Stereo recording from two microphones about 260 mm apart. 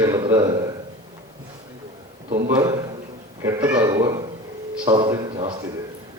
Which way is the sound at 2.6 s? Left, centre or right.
Centre.